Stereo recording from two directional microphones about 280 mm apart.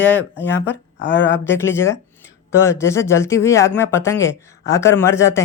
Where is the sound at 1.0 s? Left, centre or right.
Left.